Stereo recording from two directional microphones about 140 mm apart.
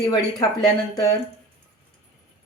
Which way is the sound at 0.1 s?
30° left (ahead or behind).